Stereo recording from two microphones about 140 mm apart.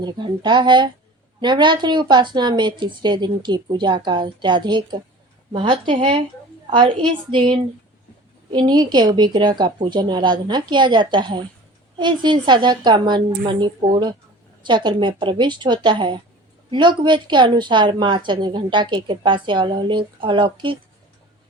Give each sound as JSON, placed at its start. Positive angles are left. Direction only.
{"t": 0.0, "sound": "a woman's voice", "side_deg": -35}